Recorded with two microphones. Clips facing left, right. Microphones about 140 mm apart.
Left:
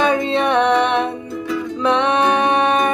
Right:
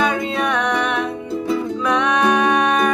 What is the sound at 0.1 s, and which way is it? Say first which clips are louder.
Music: left 4 dB; 25° left (ahead or behind).